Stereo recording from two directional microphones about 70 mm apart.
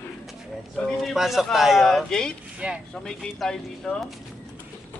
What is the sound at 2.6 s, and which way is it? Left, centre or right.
Speech, centre.